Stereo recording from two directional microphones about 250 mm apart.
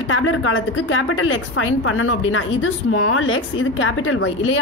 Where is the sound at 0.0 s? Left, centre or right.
Left.